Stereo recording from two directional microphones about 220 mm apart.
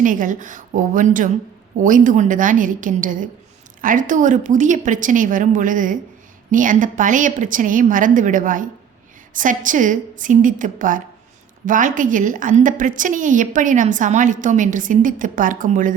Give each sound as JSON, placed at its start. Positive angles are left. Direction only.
{"t": 0.0, "sound": "a woman's voice", "side_deg": -35}